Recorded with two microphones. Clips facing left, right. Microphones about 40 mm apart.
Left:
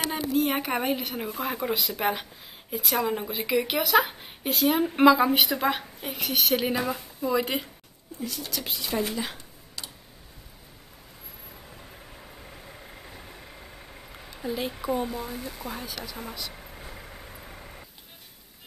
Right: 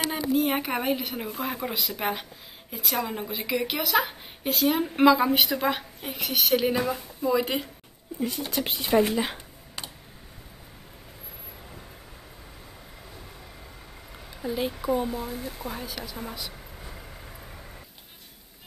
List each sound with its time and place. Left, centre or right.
0.1 s a woman's voice: centre
8.2 s speech: right
9.1 s speech: centre
9.8 s tick: right
14.1 s a woman's voice: centre